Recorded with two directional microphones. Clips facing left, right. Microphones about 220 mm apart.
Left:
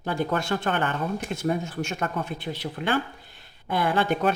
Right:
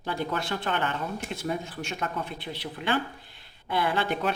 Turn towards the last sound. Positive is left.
turn(degrees=50)  # may be behind; listen again after turning